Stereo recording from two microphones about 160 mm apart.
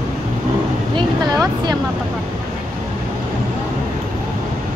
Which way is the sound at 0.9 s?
25° right (ahead or behind).